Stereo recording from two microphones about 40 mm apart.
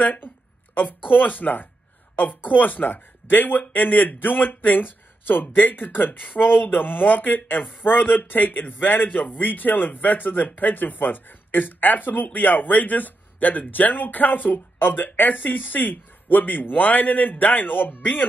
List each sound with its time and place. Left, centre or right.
1.1 s speech: left